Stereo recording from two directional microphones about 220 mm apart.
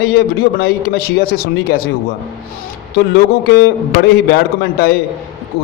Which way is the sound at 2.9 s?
45° left (ahead or behind).